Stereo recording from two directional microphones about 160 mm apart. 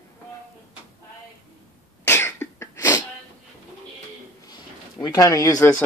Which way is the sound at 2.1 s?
15° left (ahead or behind).